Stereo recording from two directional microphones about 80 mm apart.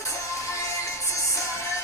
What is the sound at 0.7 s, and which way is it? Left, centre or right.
Music, left.